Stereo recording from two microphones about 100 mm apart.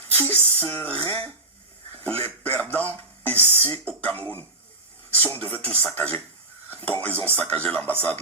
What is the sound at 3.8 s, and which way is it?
Speech, 15° left (ahead or behind).